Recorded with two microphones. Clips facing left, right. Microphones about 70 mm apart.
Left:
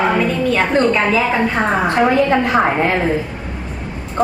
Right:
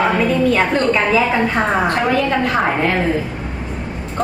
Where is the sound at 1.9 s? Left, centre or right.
Centre.